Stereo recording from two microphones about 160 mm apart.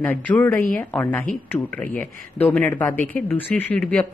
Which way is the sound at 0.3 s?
10° left (ahead or behind).